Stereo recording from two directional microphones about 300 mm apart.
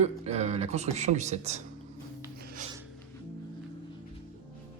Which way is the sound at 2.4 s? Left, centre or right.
Right.